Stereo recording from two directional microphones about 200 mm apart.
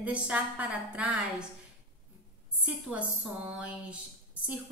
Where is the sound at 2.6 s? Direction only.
5° right (ahead or behind).